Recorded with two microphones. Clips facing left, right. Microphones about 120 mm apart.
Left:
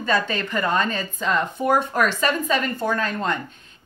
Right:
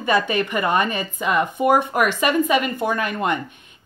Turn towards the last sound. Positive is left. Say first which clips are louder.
# right 2 dB
turn(degrees=-15)  # may be behind; listen again after turning